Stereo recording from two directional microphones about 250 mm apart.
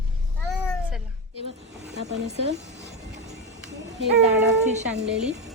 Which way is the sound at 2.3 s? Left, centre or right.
Right.